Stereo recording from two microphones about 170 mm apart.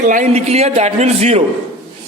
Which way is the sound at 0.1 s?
45° right (ahead or behind).